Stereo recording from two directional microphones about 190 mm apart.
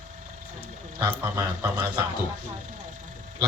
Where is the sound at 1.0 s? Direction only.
15° right (ahead or behind).